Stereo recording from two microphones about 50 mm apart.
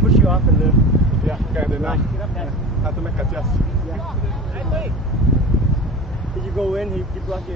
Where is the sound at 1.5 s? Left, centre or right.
Right.